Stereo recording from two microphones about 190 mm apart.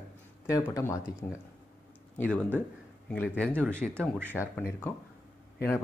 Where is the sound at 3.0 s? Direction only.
10° left (ahead or behind).